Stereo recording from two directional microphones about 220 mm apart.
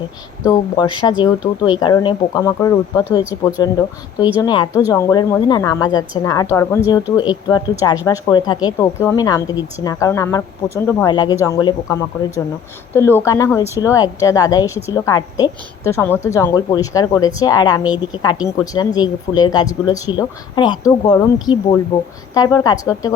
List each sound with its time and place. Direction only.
0.4 s a woman's voice: 20° left (ahead or behind)